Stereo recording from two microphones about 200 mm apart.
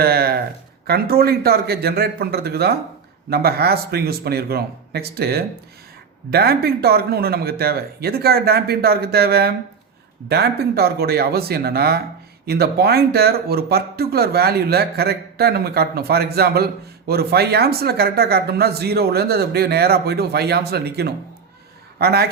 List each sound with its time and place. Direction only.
0.0 s a man's voice: 50° right (ahead or behind)